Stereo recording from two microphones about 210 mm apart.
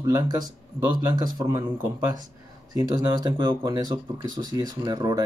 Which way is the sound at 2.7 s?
20° right (ahead or behind).